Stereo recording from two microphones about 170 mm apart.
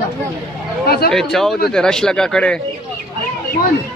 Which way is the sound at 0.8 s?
65° left (ahead or behind).